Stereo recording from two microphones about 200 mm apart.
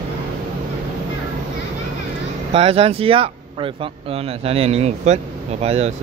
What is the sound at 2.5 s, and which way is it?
Speech, 30° right (ahead or behind).